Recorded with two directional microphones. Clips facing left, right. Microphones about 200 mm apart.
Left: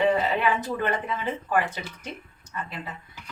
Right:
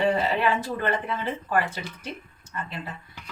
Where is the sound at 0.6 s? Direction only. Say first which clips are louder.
Even; 15° left (ahead or behind).